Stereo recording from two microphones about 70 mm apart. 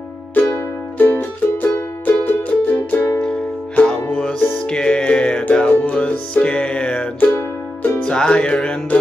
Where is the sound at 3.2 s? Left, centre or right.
Centre.